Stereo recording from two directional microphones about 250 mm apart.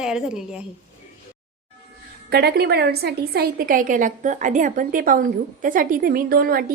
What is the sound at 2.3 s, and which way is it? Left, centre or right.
A woman's voice, right.